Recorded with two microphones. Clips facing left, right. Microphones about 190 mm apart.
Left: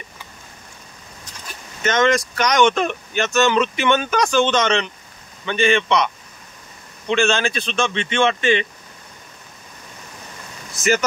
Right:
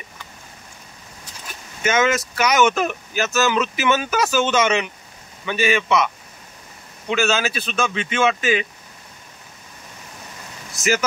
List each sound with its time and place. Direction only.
1.8 s speech: 10° right (ahead or behind)
7.1 s speech: 5° right (ahead or behind)
10.7 s speech: centre (ahead or behind)